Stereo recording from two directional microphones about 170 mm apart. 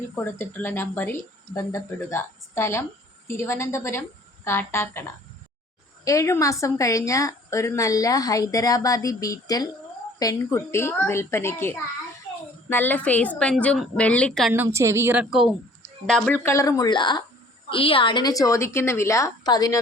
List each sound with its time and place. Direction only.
0.2 s speech: 10° left (ahead or behind)
6.1 s a woman's voice: 20° left (ahead or behind)
14.5 s a woman's voice: 15° right (ahead or behind); by 19.8 s 20° left (ahead or behind)